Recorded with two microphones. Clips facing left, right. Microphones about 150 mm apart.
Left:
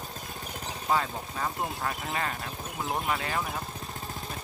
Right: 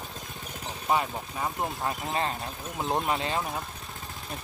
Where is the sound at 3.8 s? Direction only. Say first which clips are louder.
Left 3 dB; 40° left (ahead or behind).